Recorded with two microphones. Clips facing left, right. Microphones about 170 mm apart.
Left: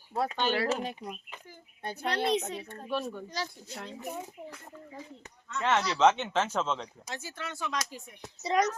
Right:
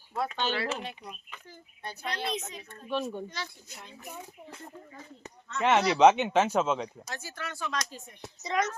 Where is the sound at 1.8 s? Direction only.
50° left (ahead or behind).